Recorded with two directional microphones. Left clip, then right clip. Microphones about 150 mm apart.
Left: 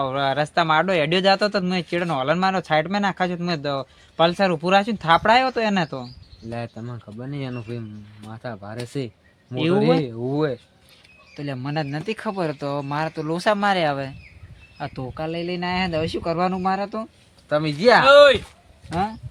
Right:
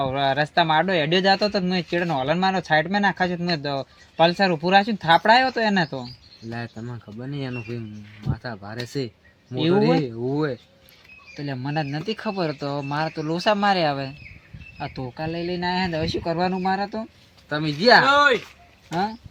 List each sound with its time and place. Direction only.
0.0 s speech: 10° right (ahead or behind)
6.5 s speech: 15° left (ahead or behind)
11.3 s speech: centre (ahead or behind)
15.0 s speech: centre (ahead or behind)
17.5 s speech: 20° left (ahead or behind)
18.0 s speech: 75° left (ahead or behind)